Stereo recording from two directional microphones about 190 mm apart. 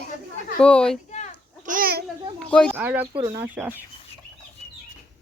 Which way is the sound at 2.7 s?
10° right (ahead or behind).